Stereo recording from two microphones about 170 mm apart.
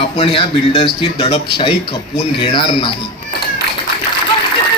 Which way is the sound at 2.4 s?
30° left (ahead or behind).